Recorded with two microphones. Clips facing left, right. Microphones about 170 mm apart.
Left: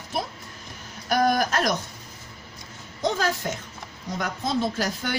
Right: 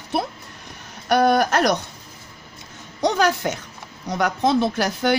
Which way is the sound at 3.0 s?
75° right (ahead or behind).